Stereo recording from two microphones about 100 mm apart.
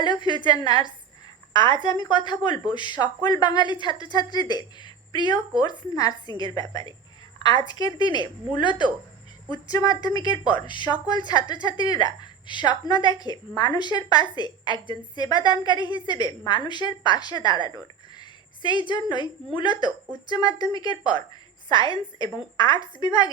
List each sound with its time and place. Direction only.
0.0 s a woman's voice: 50° left (ahead or behind)
9.5 s a woman's voice: 40° left (ahead or behind)